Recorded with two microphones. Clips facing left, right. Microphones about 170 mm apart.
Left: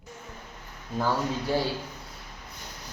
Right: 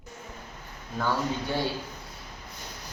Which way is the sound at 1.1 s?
Centre (ahead or behind).